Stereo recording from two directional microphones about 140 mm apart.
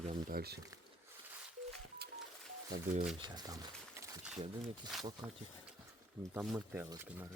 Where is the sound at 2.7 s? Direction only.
90° right.